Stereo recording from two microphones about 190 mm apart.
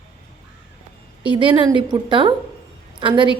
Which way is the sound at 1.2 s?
25° right (ahead or behind).